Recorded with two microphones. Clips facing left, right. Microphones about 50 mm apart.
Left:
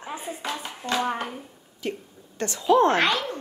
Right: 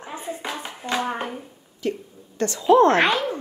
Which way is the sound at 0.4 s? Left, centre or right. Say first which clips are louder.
Right 1 dB; centre.